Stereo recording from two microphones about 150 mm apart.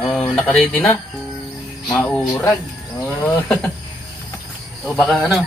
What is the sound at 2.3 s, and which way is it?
Speech, 20° left (ahead or behind).